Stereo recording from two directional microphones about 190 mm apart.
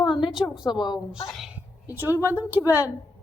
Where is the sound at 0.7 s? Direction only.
25° left (ahead or behind).